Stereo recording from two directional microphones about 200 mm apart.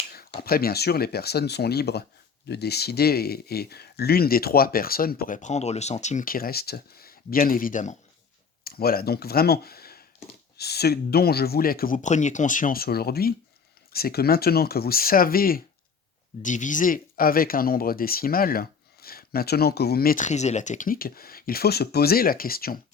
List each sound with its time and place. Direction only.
0.1 s speech: 50° left (ahead or behind)